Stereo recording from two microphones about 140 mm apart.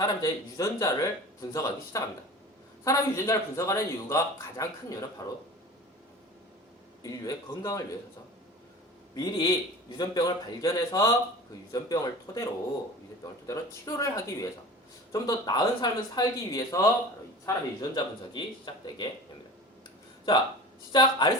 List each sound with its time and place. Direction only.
0.0 s a man's voice: 25° left (ahead or behind)
7.0 s a man's voice: 25° left (ahead or behind)
9.1 s a man's voice: 30° left (ahead or behind)
20.9 s speech: 30° left (ahead or behind)